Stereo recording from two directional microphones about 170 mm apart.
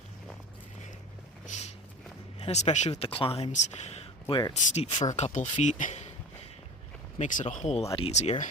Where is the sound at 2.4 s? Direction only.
40° left (ahead or behind).